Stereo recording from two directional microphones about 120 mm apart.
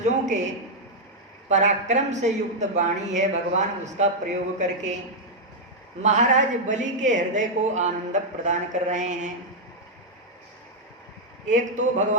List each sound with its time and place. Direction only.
0.0 s a woman's voice: 80° right
6.0 s a woman's voice: 90° right
11.4 s a woman's voice: 90° right